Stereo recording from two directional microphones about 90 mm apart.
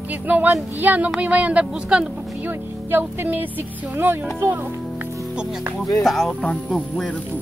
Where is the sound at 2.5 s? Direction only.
25° right (ahead or behind).